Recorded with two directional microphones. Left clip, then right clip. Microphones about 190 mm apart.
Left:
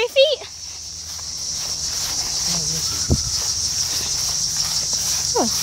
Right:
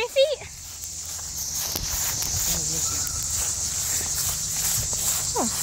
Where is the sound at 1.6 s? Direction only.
45° right (ahead or behind).